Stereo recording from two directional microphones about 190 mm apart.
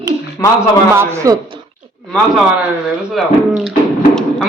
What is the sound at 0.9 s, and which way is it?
Speech, 15° right (ahead or behind).